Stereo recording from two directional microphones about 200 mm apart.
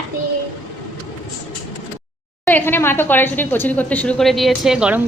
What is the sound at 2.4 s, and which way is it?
Speech, 10° left (ahead or behind).